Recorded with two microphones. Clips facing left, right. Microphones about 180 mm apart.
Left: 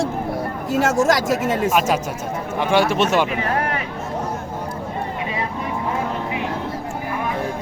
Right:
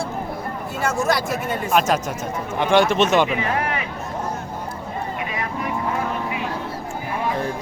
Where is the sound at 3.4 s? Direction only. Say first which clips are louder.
Left 1 dB; 45° left (ahead or behind).